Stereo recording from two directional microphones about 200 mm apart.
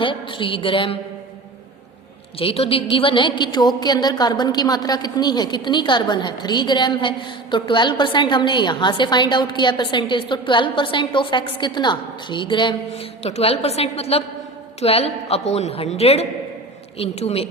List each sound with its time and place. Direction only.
0.0 s a woman's voice: 25° left (ahead or behind)
2.4 s a woman's voice: 25° left (ahead or behind)